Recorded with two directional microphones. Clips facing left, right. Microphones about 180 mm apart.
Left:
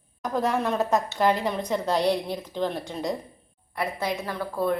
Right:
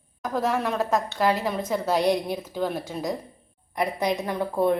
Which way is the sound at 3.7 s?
15° right (ahead or behind).